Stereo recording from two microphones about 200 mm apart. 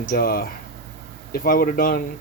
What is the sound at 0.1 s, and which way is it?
Speech, 45° left (ahead or behind).